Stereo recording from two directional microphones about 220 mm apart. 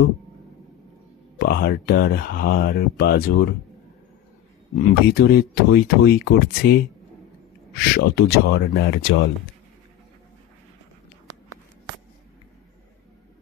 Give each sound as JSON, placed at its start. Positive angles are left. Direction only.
{"t": 1.4, "sound": "speech", "side_deg": 45}
{"t": 5.0, "sound": "speech", "side_deg": 45}